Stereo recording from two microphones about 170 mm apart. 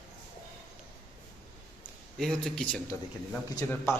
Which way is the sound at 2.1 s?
Centre (ahead or behind).